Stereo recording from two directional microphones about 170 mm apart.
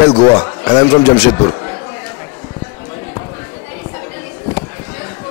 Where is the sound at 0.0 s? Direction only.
30° left (ahead or behind).